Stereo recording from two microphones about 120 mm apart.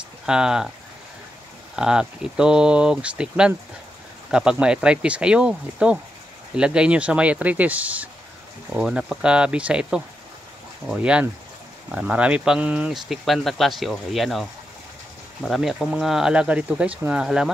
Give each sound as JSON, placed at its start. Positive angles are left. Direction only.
{"t": 0.3, "sound": "speech", "side_deg": -5}
{"t": 1.8, "sound": "speech", "side_deg": -5}